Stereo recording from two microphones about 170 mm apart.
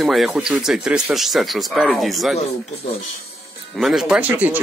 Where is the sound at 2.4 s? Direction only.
35° left (ahead or behind).